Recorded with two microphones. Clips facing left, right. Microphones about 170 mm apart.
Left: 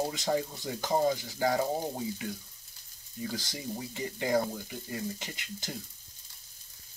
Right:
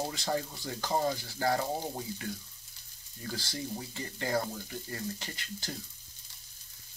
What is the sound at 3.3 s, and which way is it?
Speech, 20° left (ahead or behind).